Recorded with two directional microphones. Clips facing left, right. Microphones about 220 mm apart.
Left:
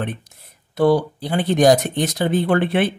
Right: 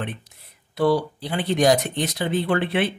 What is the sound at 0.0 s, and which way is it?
Speech, 45° left (ahead or behind).